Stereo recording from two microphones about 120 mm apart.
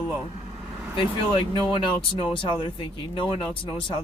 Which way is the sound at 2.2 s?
45° left (ahead or behind).